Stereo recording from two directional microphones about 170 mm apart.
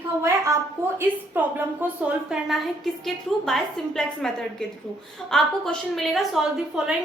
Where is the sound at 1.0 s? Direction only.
10° right (ahead or behind).